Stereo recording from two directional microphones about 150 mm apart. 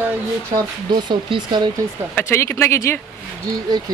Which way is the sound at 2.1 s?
15° left (ahead or behind).